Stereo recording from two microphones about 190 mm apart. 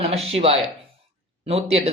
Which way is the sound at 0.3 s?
30° right (ahead or behind).